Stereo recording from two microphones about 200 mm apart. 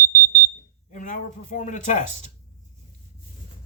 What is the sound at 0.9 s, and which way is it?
Speech, 40° left (ahead or behind).